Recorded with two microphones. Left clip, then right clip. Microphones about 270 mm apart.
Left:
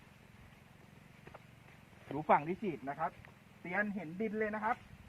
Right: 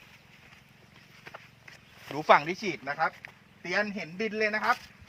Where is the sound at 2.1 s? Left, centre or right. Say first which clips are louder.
Right 9 dB; right.